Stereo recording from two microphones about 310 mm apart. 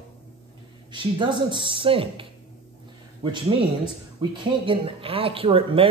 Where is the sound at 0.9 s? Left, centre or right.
Centre.